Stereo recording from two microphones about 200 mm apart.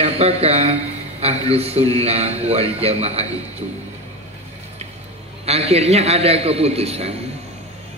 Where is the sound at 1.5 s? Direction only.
30° right (ahead or behind).